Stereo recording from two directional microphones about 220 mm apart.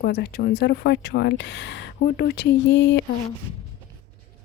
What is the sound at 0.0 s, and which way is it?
Speech, 45° left (ahead or behind).